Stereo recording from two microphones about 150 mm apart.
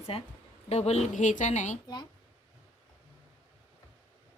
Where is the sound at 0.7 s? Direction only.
45° left (ahead or behind).